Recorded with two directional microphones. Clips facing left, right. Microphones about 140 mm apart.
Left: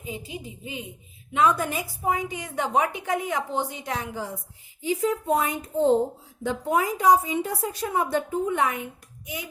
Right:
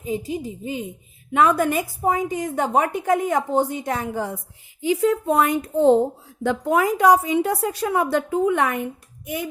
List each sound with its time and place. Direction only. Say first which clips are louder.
0.0 s a woman's voice: right 9 dB; 40° right (ahead or behind)
1.3 s a woman's voice: right 5 dB; 55° right (ahead or behind)
2.0 s a woman's voice: right 5 dB; 45° right (ahead or behind)
4.8 s a woman's voice: right 5 dB; 80° right; by 9.5 s 55° right (ahead or behind)